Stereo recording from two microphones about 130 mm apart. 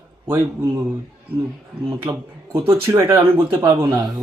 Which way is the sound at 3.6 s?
35° right (ahead or behind).